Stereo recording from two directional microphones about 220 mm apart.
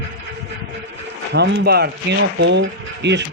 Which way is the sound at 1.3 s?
50° right (ahead or behind).